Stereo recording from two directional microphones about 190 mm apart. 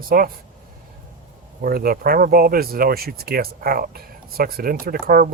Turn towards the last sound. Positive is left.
turn(degrees=-50)  # may be behind; listen again after turning